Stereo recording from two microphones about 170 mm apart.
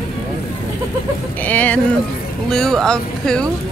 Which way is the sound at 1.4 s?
10° left (ahead or behind).